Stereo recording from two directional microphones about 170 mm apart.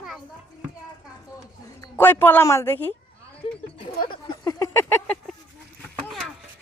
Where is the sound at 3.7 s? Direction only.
30° left (ahead or behind); by 5.4 s 5° left (ahead or behind).